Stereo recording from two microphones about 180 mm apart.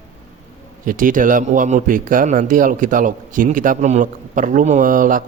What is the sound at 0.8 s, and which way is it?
A man's voice, 50° right (ahead or behind).